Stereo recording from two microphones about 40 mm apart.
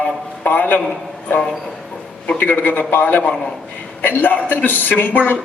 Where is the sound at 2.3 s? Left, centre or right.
Left.